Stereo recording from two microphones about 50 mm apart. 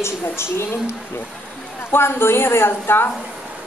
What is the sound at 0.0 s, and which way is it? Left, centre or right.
A woman's voice, left.